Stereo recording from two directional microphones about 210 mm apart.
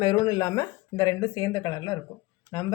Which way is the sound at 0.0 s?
20° left (ahead or behind).